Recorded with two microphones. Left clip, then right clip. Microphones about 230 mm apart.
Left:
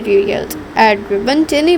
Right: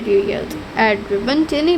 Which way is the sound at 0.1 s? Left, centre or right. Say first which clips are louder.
Left 4 dB; left.